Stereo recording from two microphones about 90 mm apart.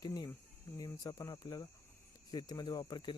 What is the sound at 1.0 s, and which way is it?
Speech, 40° left (ahead or behind).